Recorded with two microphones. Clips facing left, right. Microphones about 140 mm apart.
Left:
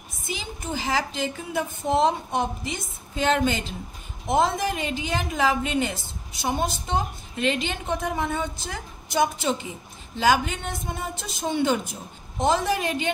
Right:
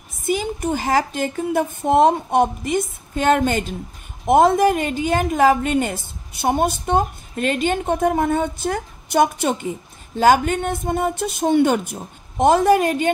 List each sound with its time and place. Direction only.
0.3 s a woman's voice: 55° right (ahead or behind)